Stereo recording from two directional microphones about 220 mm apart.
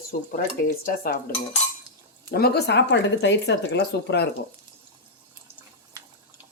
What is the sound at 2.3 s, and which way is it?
Speech, 45° left (ahead or behind).